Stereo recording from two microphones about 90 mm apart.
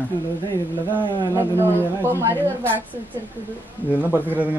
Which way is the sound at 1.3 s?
30° right (ahead or behind).